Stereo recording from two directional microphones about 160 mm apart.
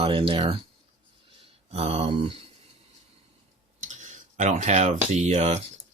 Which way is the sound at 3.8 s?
50° right (ahead or behind).